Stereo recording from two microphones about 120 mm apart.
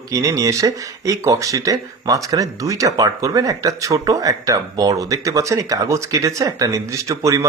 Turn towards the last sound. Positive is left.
turn(degrees=-25)  # may be behind; listen again after turning